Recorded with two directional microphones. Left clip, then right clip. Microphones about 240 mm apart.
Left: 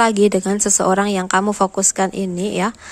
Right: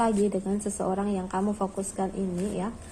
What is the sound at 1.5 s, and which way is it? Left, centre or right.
Speech, left.